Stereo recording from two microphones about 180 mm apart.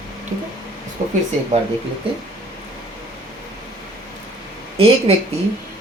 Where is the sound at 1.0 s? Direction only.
45° right (ahead or behind).